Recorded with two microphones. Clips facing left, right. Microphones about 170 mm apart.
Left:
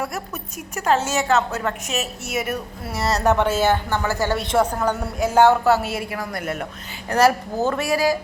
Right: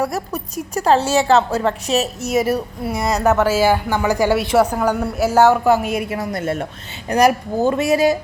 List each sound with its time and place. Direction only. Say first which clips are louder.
0.0 s a woman's voice: right 6 dB; 35° right (ahead or behind)
2.9 s a woman's voice: right 2 dB; 15° right (ahead or behind); by 6.7 s 30° right (ahead or behind)
7.1 s speech: right 3 dB; 15° right (ahead or behind)